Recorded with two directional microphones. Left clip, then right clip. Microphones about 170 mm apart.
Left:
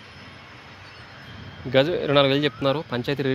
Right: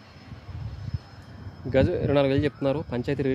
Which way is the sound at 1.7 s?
10° right (ahead or behind).